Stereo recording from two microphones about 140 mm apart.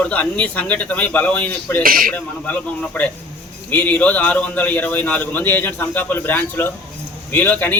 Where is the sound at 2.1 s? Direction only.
10° left (ahead or behind).